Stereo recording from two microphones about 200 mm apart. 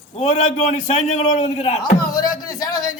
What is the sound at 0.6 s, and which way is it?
A man's voice, 35° left (ahead or behind).